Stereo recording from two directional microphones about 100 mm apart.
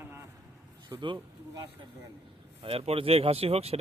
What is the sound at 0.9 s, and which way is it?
Speech, 40° right (ahead or behind).